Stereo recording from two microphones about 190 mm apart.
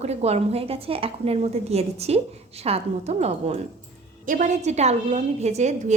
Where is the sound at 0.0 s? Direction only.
35° right (ahead or behind).